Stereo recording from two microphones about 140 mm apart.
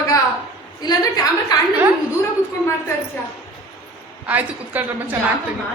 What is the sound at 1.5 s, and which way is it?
Speech, 30° left (ahead or behind).